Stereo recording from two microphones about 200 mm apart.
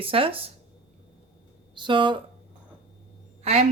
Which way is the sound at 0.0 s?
25° right (ahead or behind).